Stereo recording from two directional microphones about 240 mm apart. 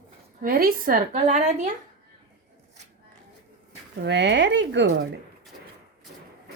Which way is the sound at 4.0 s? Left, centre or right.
Right.